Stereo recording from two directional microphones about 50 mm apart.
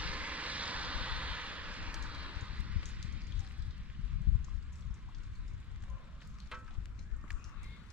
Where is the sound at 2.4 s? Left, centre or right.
Right.